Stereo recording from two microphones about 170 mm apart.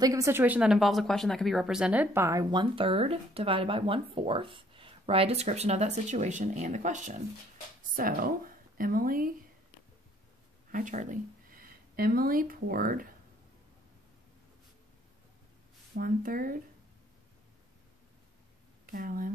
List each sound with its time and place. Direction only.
0.0 s speech: 20° right (ahead or behind); by 7.2 s 45° right (ahead or behind)
7.9 s a woman's voice: 55° right (ahead or behind)
10.7 s speech: 50° right (ahead or behind)
16.0 s a woman's voice: 55° right (ahead or behind)
18.9 s speech: 60° right (ahead or behind)